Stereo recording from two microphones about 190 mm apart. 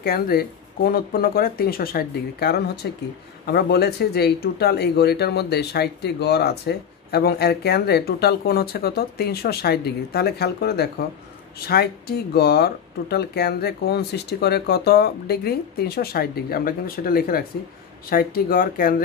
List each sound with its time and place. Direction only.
0.0 s speech: 50° left (ahead or behind)